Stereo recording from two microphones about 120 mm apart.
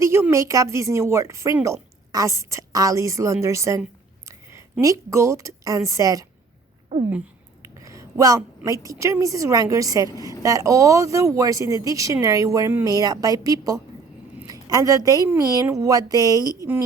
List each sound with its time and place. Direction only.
0.0 s a woman's voice: 25° right (ahead or behind)
7.9 s a sound: 25° right (ahead or behind)
8.6 s a woman's voice: 30° right (ahead or behind)